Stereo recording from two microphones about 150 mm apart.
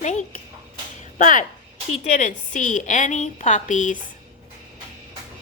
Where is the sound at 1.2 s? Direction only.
60° left (ahead or behind).